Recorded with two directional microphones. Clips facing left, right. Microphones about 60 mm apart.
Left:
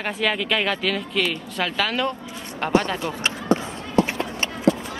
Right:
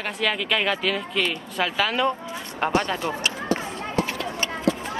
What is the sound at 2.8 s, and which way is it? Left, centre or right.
Speech, right.